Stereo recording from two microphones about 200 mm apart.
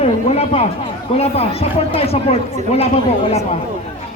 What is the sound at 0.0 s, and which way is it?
A man's voice, 30° left (ahead or behind).